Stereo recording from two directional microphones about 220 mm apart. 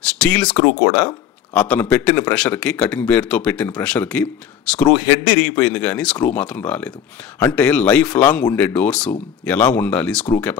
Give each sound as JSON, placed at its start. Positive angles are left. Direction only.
{"t": 0.0, "sound": "speech", "side_deg": 5}